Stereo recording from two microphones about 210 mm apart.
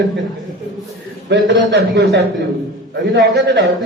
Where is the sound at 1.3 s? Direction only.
60° right (ahead or behind).